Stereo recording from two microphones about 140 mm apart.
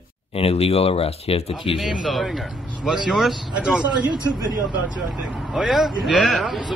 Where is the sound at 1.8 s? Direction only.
Centre (ahead or behind).